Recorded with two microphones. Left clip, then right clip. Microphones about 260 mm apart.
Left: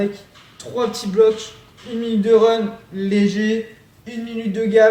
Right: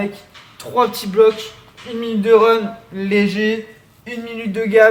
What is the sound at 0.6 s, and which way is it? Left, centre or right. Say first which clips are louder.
A man's voice: right 5 dB; centre.